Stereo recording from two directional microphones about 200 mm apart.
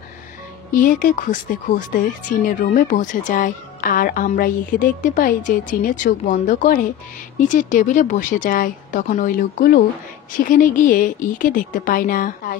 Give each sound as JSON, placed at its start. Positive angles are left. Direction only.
{"t": 0.7, "sound": "speech", "side_deg": 40}